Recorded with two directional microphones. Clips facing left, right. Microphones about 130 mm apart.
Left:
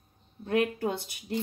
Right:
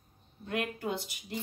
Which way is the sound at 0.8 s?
45° left (ahead or behind).